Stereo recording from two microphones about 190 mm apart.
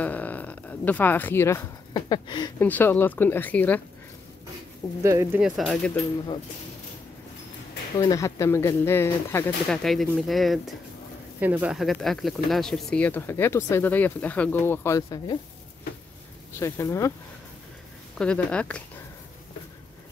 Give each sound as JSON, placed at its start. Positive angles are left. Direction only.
{"t": 0.0, "sound": "speech", "side_deg": 10}
{"t": 2.6, "sound": "speech", "side_deg": 10}
{"t": 5.0, "sound": "speech", "side_deg": -15}
{"t": 5.4, "sound": "speech", "side_deg": 0}
{"t": 8.0, "sound": "speech", "side_deg": 15}
{"t": 9.7, "sound": "speech", "side_deg": 0}
{"t": 16.5, "sound": "speech", "side_deg": 15}
{"t": 18.1, "sound": "speech", "side_deg": 5}